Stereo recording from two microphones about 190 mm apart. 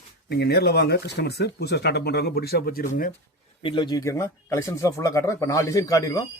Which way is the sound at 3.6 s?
25° left (ahead or behind).